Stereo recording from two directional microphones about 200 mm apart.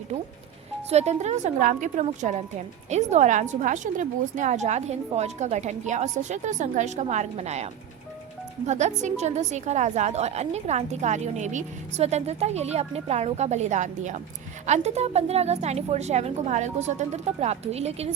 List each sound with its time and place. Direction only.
0.9 s a woman's voice: 35° right (ahead or behind)